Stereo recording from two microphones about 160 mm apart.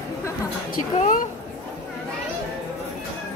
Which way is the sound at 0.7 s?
55° left (ahead or behind).